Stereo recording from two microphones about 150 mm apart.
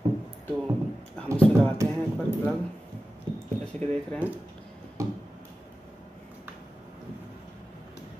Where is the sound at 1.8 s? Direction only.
20° right (ahead or behind).